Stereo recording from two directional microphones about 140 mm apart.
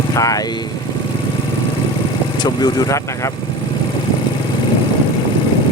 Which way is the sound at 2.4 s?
30° left (ahead or behind).